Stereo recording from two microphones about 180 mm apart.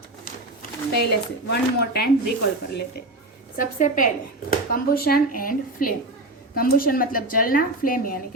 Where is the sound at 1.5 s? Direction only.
60° left (ahead or behind).